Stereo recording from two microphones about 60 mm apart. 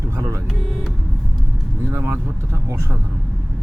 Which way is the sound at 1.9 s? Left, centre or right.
Right.